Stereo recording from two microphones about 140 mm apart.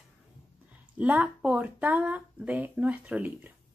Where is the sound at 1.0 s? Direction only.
10° right (ahead or behind).